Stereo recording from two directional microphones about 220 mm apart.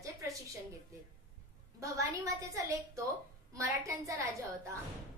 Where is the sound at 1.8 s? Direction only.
15° right (ahead or behind).